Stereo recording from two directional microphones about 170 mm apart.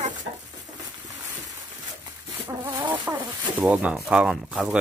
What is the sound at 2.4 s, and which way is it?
Chicken, 15° right (ahead or behind).